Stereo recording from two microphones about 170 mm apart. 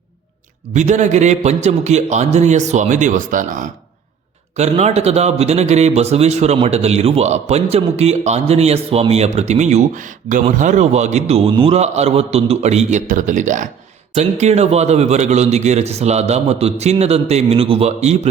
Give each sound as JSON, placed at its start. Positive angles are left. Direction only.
{"t": 0.7, "sound": "a man's voice", "side_deg": -45}